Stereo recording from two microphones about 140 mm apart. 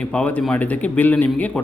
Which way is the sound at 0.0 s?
10° left (ahead or behind).